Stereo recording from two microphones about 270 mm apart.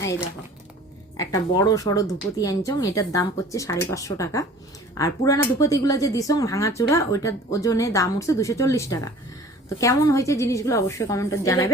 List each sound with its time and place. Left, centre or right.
1.1 s speech: centre